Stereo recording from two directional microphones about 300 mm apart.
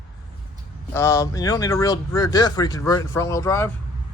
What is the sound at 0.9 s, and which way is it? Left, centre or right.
Speech, centre.